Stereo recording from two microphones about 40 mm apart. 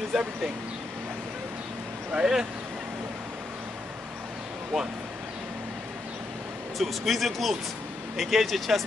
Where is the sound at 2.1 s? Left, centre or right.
Centre.